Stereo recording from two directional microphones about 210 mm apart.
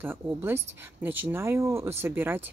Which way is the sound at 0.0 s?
10° right (ahead or behind).